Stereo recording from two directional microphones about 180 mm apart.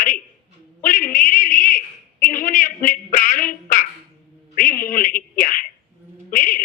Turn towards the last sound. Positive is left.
turn(degrees=45)  # may be behind; listen again after turning